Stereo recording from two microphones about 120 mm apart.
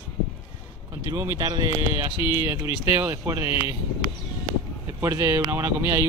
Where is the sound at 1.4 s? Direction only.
35° right (ahead or behind).